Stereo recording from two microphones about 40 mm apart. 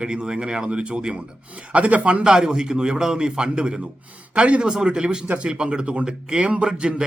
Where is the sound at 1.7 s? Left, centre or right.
Right.